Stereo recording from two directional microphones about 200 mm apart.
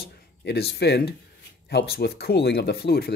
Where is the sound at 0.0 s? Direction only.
55° left (ahead or behind).